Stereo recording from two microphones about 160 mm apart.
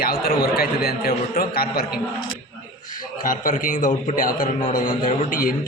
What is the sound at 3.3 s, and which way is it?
A man's voice, 55° left (ahead or behind).